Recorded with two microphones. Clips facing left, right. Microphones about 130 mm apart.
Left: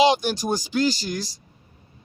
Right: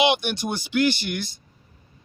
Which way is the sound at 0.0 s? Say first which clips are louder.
Left 3 dB; 35° left (ahead or behind).